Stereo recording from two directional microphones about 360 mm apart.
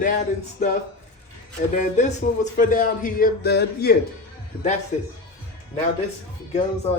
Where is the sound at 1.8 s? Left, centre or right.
Centre.